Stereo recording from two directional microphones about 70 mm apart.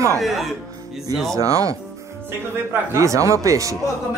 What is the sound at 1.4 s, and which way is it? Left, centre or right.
Speech, right.